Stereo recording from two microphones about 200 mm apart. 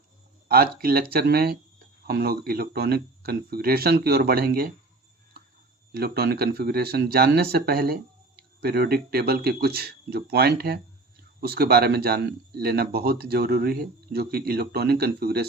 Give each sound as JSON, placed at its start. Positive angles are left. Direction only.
{"t": 0.4, "sound": "speech", "side_deg": -50}
{"t": 5.9, "sound": "speech", "side_deg": -50}